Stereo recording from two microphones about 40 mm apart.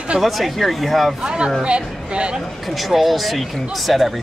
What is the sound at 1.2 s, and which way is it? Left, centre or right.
Speech, right.